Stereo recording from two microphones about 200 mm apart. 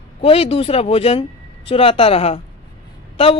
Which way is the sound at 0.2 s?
30° left (ahead or behind).